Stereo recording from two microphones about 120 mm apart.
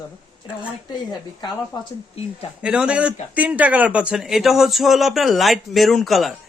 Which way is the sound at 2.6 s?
10° right (ahead or behind).